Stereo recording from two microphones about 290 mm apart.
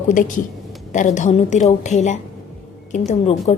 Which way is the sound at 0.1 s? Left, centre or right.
Left.